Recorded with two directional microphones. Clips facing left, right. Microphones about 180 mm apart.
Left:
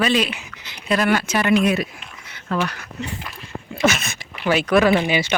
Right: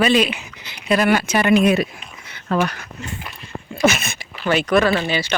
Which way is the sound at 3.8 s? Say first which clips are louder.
Right 2 dB; 10° right (ahead or behind).